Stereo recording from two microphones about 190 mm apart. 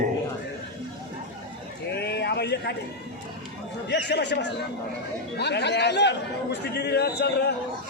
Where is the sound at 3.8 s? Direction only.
65° left (ahead or behind).